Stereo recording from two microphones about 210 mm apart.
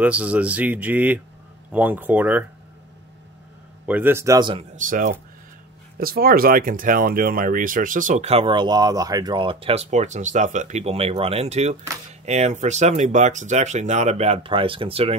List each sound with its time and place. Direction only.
0.0 s speech: 5° right (ahead or behind)
3.8 s speech: 10° right (ahead or behind)
4.7 s speech: 40° right (ahead or behind)